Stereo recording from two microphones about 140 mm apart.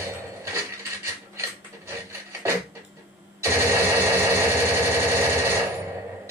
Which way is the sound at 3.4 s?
20° right (ahead or behind).